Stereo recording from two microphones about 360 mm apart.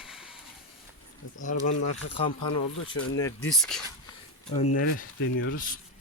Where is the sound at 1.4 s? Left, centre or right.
Left.